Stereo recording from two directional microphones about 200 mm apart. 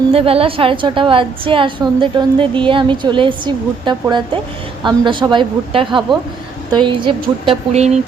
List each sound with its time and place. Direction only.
0.1 s a woman's voice: 30° right (ahead or behind)